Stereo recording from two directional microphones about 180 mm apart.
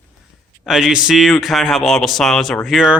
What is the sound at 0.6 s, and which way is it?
Speech, 5° right (ahead or behind).